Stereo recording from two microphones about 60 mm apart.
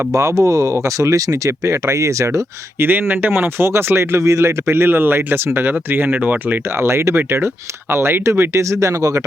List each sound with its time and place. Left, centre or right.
0.1 s speech: right
2.8 s speech: right
6.7 s speech: right